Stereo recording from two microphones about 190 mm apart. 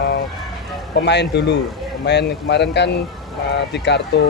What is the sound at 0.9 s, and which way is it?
Speech, 65° left (ahead or behind).